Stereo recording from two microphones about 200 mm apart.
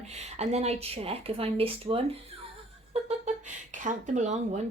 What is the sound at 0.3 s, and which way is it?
Speech, 35° right (ahead or behind).